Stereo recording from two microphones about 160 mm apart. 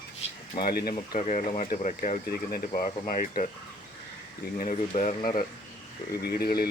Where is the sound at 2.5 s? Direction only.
65° left (ahead or behind).